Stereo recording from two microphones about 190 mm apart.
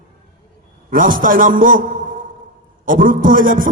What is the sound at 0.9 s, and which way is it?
Speech, 45° right (ahead or behind).